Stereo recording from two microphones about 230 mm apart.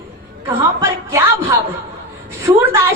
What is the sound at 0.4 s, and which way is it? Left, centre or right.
A woman's voice, centre.